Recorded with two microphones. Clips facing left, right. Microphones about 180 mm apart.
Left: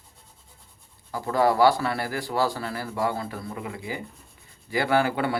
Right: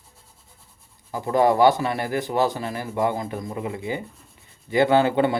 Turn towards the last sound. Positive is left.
turn(degrees=-25)  # may be behind; listen again after turning